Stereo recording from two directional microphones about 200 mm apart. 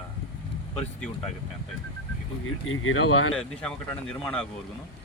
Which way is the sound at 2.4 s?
90° left.